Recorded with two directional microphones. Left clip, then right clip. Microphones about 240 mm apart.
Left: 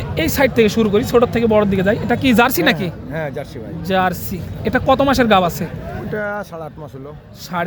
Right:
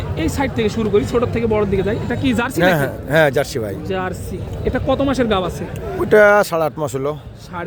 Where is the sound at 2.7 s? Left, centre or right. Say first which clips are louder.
Right 10 dB; right.